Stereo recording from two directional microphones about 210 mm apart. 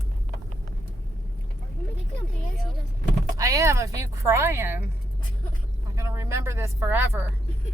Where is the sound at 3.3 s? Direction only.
15° right (ahead or behind).